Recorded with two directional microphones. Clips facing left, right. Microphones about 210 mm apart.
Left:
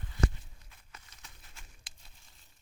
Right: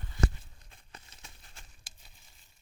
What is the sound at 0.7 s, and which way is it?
Crumpling, 30° right (ahead or behind).